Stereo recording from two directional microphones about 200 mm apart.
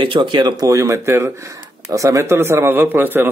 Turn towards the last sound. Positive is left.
turn(degrees=-10)  # may be behind; listen again after turning